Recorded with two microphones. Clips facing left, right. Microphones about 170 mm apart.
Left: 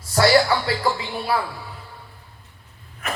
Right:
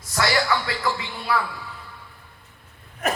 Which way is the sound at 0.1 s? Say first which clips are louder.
Left 6 dB; 30° left (ahead or behind).